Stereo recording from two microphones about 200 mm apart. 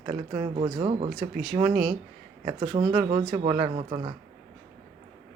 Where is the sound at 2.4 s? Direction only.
25° right (ahead or behind).